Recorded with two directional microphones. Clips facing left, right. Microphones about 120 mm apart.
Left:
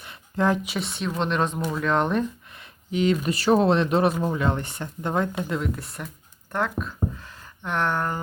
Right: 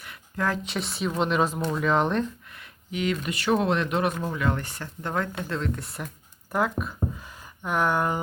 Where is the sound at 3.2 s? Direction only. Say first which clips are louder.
Left 3 dB; 35° left (ahead or behind); by 8.2 s 10° right (ahead or behind).